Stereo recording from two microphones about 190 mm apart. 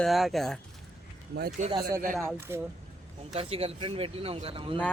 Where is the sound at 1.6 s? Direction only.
40° right (ahead or behind).